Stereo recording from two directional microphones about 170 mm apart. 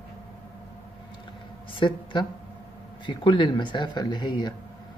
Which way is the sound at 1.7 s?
30° left (ahead or behind).